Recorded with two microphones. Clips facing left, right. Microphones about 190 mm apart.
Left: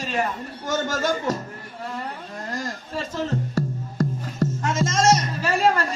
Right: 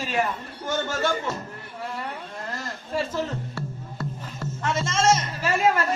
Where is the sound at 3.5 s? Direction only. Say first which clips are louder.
Left 8 dB; 40° left (ahead or behind).